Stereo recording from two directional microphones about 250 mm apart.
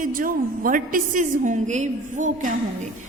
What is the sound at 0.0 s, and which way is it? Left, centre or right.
Speech, right.